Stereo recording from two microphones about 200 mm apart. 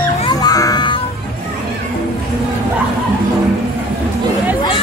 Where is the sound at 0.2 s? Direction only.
20° left (ahead or behind).